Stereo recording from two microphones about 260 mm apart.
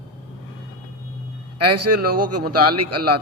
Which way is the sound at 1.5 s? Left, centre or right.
Right.